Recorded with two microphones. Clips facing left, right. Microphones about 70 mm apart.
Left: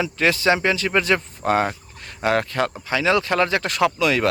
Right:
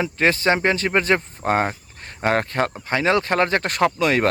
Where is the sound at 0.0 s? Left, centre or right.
Right.